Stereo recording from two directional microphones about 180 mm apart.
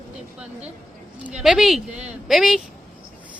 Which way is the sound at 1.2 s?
5° right (ahead or behind).